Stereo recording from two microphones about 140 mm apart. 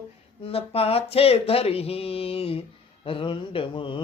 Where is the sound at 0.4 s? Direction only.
45° left (ahead or behind).